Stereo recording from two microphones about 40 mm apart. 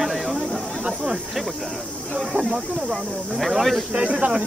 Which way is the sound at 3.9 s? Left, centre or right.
Right.